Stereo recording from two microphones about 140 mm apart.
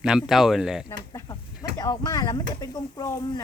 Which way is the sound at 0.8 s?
25° left (ahead or behind).